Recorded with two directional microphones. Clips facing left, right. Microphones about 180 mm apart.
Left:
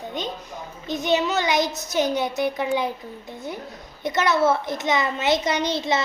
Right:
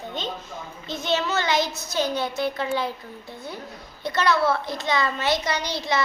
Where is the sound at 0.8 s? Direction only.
15° left (ahead or behind).